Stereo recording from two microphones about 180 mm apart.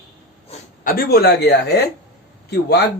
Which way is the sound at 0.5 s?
35° left (ahead or behind).